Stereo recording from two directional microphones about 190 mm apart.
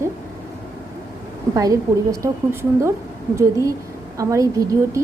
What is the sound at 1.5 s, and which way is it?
A woman's voice, 20° right (ahead or behind).